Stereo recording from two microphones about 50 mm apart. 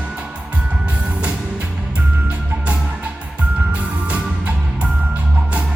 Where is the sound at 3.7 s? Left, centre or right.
Right.